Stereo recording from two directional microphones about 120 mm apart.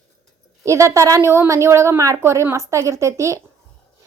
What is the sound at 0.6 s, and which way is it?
A woman's voice, 25° right (ahead or behind).